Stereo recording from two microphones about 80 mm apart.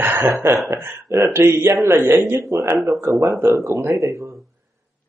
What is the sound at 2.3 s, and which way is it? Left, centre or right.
Speech, right.